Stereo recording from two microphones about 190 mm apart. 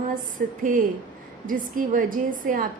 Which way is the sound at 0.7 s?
45° right (ahead or behind).